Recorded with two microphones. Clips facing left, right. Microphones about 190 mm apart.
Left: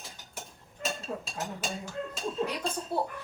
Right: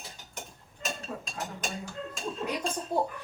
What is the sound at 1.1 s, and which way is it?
Speech, 15° left (ahead or behind).